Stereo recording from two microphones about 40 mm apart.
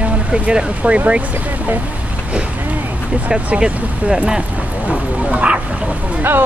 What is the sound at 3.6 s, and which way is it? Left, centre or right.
Speech, centre.